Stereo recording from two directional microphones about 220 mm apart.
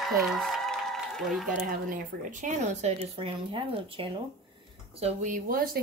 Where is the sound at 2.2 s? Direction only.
35° right (ahead or behind).